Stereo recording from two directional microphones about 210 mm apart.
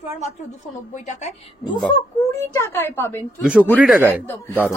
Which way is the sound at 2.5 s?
10° left (ahead or behind).